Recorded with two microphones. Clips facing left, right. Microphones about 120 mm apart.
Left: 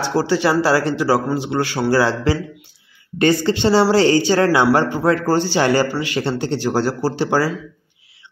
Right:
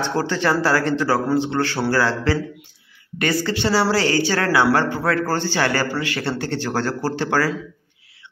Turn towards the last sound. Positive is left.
turn(degrees=15)  # may be behind; listen again after turning